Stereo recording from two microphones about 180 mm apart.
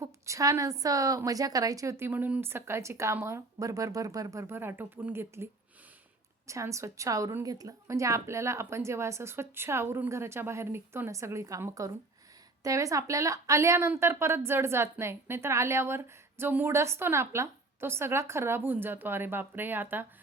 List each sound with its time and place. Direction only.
0.0 s a woman's voice: 15° right (ahead or behind)
6.5 s a woman's voice: 15° right (ahead or behind)